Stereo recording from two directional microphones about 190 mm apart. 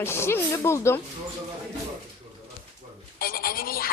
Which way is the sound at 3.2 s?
50° left (ahead or behind).